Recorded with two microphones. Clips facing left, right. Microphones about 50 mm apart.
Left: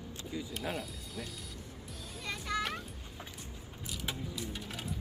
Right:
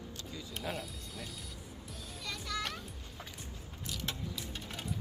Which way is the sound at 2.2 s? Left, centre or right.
Left.